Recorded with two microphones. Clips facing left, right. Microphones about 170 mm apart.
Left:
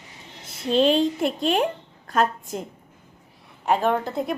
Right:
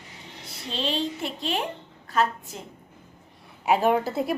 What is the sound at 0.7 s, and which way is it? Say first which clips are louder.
A woman's voice: left 10 dB; 50° left (ahead or behind).